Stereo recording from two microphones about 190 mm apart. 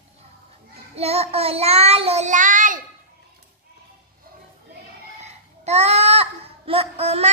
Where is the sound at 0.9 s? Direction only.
30° right (ahead or behind).